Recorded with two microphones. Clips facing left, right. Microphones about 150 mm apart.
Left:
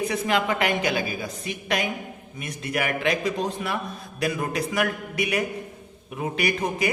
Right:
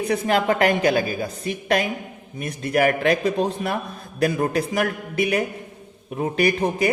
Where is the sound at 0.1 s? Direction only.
40° right (ahead or behind).